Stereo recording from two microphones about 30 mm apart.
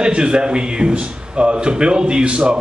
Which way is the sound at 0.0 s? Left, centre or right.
Right.